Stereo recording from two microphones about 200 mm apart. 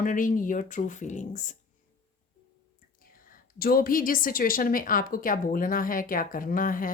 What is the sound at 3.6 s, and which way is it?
Speech, 45° left (ahead or behind).